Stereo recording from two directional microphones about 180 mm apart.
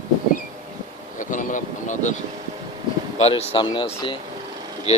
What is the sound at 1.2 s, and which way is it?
Vehicle, 45° left (ahead or behind).